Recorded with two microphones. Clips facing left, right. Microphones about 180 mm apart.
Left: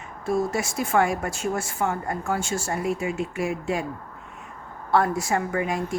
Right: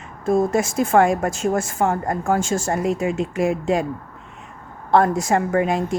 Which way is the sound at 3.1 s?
90° right.